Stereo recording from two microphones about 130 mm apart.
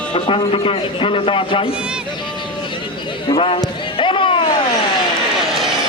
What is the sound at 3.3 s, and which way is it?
A man's voice, 45° left (ahead or behind).